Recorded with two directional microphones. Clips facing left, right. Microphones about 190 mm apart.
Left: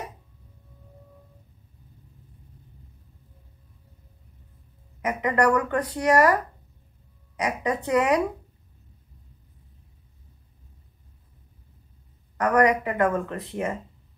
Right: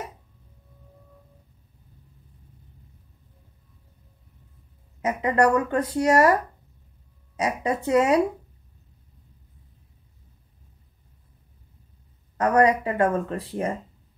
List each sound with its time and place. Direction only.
5.2 s speech: 25° right (ahead or behind)
7.4 s speech: 30° right (ahead or behind)
12.4 s speech: 30° right (ahead or behind)